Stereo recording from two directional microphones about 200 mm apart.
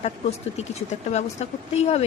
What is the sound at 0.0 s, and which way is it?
A woman's voice, 30° left (ahead or behind).